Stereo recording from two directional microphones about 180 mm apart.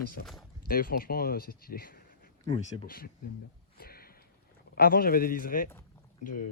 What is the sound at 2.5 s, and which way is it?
Speech, 30° left (ahead or behind).